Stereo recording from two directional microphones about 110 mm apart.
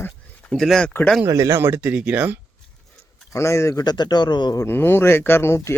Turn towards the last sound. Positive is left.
turn(degrees=25)  # may be behind; listen again after turning